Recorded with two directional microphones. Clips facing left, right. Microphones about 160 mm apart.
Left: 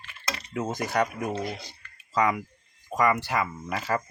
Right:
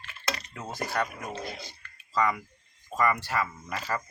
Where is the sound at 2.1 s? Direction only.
15° left (ahead or behind).